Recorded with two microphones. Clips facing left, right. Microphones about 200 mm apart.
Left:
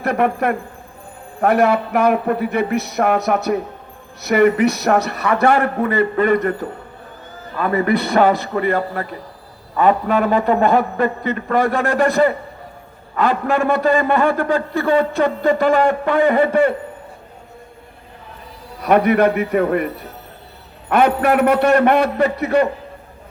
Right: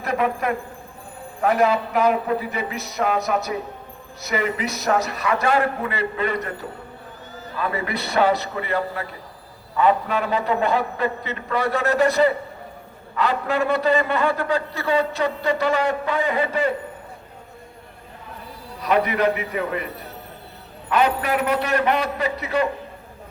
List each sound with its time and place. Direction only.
0.0 s a man's voice: 60° left (ahead or behind)
18.8 s a man's voice: 55° left (ahead or behind)
20.9 s a man's voice: 55° left (ahead or behind)